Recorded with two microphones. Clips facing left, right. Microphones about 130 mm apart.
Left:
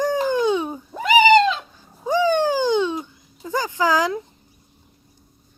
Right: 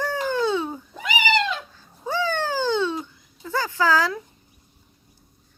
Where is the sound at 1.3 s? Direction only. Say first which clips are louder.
Left 9 dB; 15° left (ahead or behind).